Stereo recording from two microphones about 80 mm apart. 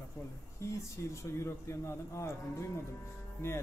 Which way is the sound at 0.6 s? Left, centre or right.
Left.